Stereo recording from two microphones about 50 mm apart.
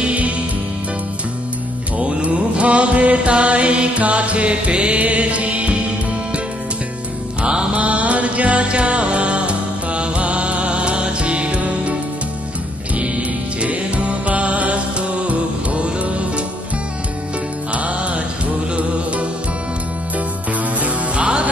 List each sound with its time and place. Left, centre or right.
0.0 s music: right
2.0 s mantra: right
7.4 s mantra: centre
7.7 s mantra: right
12.9 s music: right
17.7 s music: right
20.8 s music: right